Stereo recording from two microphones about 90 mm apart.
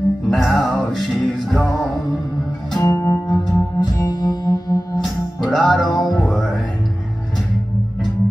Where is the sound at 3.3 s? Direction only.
50° left (ahead or behind).